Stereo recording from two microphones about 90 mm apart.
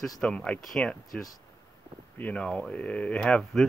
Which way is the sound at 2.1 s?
15° left (ahead or behind).